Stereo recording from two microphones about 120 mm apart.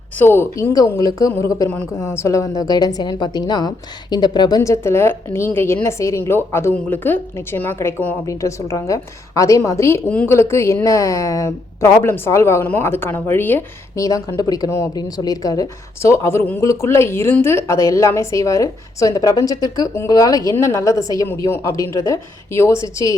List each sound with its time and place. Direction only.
0.2 s a woman's voice: 20° left (ahead or behind)